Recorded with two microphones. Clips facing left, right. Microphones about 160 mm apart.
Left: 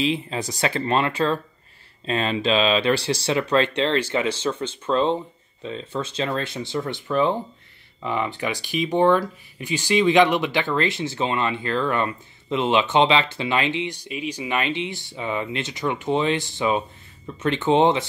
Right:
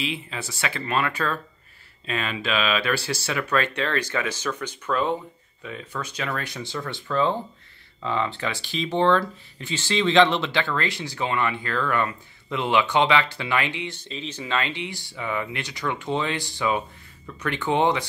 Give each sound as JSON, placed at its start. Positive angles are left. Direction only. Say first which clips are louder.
{"t": 0.0, "sound": "speech", "louder": "left 7 dB", "side_deg": 35}